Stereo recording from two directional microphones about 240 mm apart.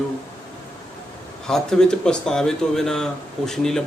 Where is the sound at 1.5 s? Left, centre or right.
Centre.